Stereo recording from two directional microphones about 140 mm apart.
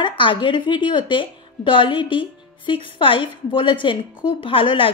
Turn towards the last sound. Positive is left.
turn(degrees=40)  # may be behind; listen again after turning